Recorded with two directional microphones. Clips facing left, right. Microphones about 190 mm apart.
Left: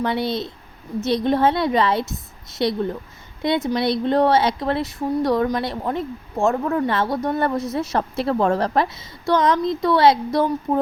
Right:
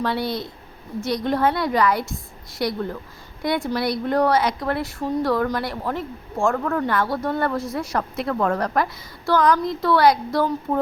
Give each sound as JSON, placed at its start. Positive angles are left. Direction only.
{"t": 0.0, "sound": "speech", "side_deg": 20}